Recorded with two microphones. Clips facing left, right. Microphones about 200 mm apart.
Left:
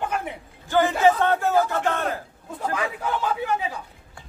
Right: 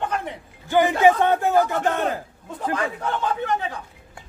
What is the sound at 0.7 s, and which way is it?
Speech, 15° right (ahead or behind).